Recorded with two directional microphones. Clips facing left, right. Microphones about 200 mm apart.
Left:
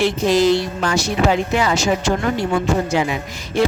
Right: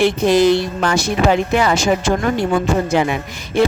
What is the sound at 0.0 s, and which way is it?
A man's voice, 55° right (ahead or behind).